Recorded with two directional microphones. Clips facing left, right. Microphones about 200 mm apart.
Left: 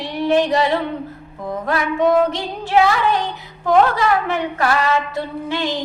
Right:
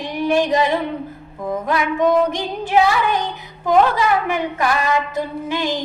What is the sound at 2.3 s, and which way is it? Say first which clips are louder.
Speech: even; 15° right (ahead or behind).